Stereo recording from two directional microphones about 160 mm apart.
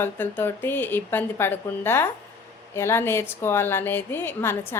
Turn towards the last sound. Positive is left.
turn(degrees=15)  # may be behind; listen again after turning